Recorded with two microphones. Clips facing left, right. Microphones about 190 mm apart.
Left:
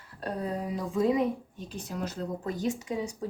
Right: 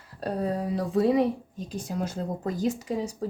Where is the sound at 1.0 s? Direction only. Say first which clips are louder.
Right 3 dB; 35° right (ahead or behind).